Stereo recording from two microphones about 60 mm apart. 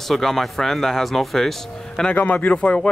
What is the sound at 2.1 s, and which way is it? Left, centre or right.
Speech, left.